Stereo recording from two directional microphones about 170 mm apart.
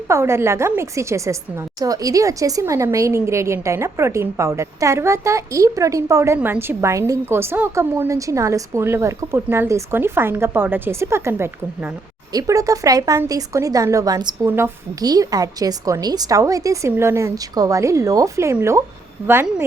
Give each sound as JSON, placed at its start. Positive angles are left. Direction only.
{"t": 0.1, "sound": "a woman's voice", "side_deg": -15}